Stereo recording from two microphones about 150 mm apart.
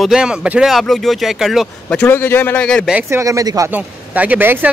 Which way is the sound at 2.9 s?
20° right (ahead or behind).